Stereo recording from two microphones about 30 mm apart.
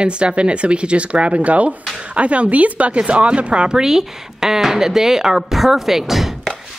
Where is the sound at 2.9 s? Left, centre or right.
Right.